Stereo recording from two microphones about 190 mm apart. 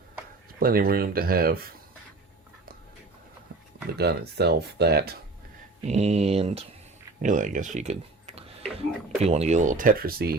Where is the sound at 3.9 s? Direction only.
60° right (ahead or behind).